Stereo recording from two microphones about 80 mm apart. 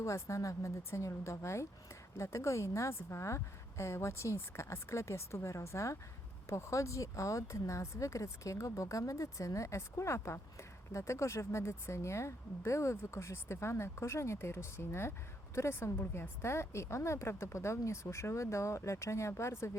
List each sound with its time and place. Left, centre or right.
0.0 s speech: left